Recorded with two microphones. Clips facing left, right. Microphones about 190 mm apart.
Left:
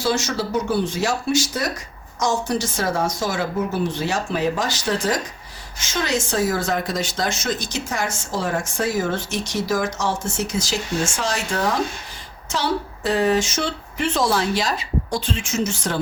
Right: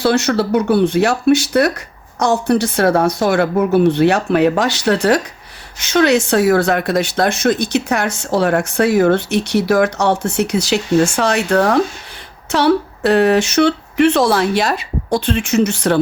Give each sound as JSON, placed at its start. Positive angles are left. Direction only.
{"t": 0.0, "sound": "speech", "side_deg": -65}